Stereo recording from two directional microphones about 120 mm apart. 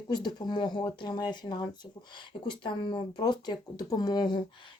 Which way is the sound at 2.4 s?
40° left (ahead or behind).